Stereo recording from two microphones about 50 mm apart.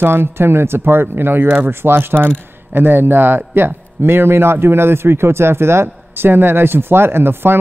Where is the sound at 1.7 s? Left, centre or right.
Right.